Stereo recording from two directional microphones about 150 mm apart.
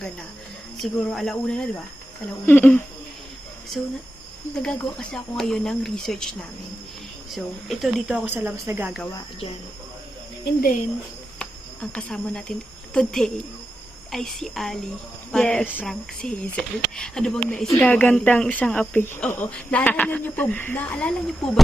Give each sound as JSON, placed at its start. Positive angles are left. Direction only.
{"t": 0.8, "sound": "speech", "side_deg": 0}
{"t": 4.6, "sound": "speech", "side_deg": 5}
{"t": 7.3, "sound": "speech", "side_deg": 0}
{"t": 10.4, "sound": "speech", "side_deg": 85}
{"t": 11.3, "sound": "speech", "side_deg": 10}